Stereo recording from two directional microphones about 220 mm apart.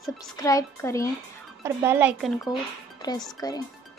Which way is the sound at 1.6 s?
10° right (ahead or behind).